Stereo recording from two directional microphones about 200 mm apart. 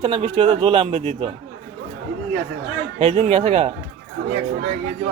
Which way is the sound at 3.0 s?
30° right (ahead or behind).